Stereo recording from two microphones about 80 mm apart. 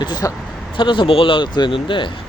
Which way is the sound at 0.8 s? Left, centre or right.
Left.